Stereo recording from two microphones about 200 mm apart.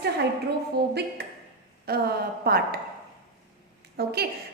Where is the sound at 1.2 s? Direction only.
55° right (ahead or behind).